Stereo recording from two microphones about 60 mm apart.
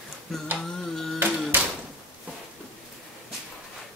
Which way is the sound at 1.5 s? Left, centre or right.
Right.